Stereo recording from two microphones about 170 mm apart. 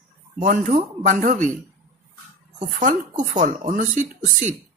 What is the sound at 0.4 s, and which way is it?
Speech, 50° right (ahead or behind).